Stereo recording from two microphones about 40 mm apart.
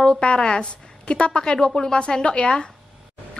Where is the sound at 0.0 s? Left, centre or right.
Left.